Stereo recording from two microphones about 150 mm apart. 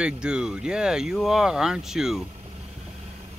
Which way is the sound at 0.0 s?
5° right (ahead or behind).